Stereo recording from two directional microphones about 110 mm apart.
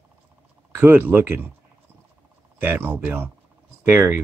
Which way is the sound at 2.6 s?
20° right (ahead or behind).